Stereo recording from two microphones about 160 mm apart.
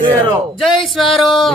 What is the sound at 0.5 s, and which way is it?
Speech, centre (ahead or behind).